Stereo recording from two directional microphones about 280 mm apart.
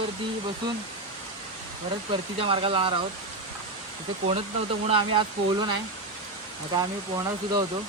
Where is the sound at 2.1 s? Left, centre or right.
Centre.